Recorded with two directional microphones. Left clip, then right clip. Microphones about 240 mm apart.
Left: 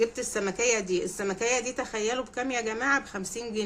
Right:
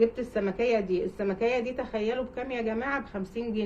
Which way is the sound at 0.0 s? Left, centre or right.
Left.